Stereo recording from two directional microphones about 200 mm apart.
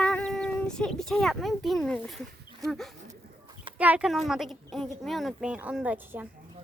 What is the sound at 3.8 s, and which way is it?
Speech, 5° right (ahead or behind).